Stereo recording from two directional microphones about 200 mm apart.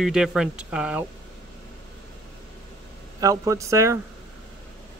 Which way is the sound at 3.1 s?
15° right (ahead or behind).